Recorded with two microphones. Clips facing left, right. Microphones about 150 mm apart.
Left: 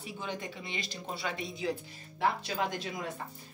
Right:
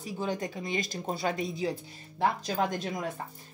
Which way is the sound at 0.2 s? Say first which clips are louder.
Right 7 dB; 40° right (ahead or behind).